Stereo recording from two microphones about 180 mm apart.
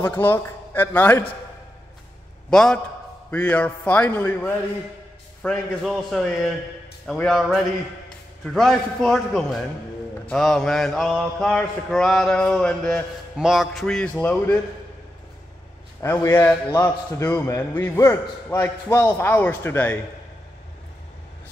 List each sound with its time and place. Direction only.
0.0 s a man's voice: 10° left (ahead or behind)
2.5 s mantra: 5° left (ahead or behind)
3.3 s a man's voice: 10° left (ahead or behind)
5.4 s mantra: centre (ahead or behind)
14.1 s a man's voice: 10° left (ahead or behind)
16.0 s a man's voice: 15° left (ahead or behind)